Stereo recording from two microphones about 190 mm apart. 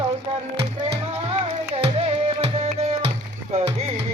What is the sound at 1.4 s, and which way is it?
Music, 30° right (ahead or behind).